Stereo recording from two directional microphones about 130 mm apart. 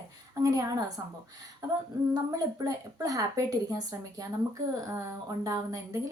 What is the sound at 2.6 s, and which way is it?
Speech, 25° right (ahead or behind).